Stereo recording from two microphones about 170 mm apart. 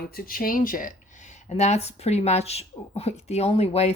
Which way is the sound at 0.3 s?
55° left (ahead or behind).